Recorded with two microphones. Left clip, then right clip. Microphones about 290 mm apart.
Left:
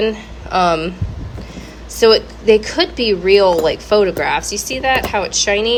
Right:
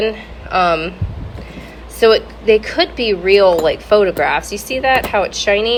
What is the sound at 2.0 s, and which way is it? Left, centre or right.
Speech, centre.